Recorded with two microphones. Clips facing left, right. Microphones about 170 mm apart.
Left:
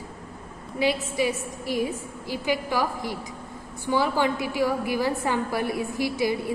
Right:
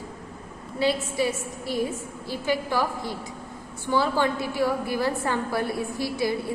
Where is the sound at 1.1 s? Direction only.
15° left (ahead or behind).